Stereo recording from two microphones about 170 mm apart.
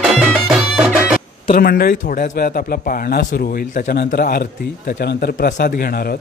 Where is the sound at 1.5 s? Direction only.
60° left (ahead or behind).